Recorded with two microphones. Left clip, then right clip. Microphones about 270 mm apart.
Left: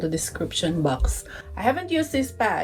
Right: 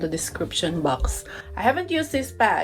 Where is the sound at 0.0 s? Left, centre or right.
Right.